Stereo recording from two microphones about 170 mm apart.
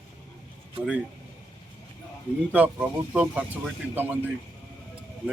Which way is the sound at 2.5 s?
10° right (ahead or behind).